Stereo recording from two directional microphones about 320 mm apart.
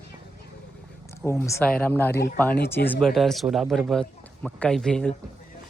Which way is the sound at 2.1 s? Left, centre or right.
Left.